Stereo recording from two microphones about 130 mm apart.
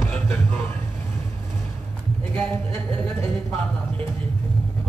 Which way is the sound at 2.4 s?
5° left (ahead or behind).